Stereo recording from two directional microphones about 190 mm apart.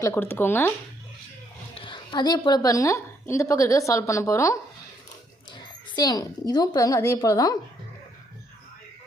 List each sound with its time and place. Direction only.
0.0 s speech: 10° left (ahead or behind)
1.7 s a woman's voice: 25° left (ahead or behind)
6.0 s a woman's voice: 20° left (ahead or behind)